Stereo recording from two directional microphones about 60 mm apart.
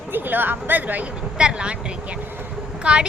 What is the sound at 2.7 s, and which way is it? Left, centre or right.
Vehicle, centre.